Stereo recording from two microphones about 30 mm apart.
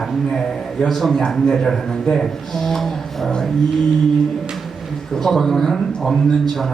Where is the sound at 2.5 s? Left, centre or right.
Centre.